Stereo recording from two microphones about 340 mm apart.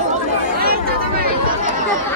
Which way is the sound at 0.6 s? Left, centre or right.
Right.